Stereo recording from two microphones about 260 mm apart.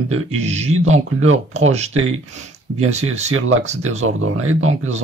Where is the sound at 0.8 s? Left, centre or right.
Right.